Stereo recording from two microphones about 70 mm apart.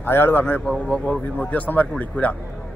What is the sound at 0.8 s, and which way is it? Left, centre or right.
A man's voice, centre.